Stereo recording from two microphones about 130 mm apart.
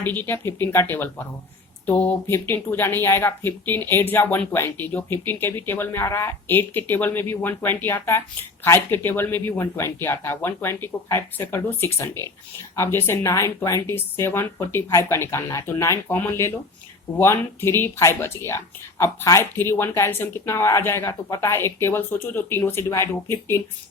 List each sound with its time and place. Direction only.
0.0 s speech: 15° left (ahead or behind)